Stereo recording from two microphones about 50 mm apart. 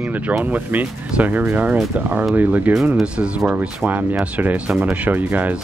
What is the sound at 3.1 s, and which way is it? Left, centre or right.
Speech, centre.